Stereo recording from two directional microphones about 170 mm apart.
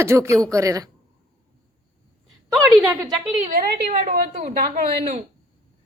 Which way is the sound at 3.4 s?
45° right (ahead or behind).